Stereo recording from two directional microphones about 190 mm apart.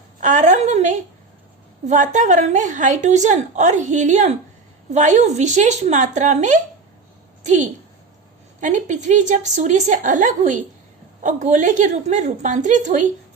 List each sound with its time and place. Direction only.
0.2 s a woman's voice: 40° right (ahead or behind)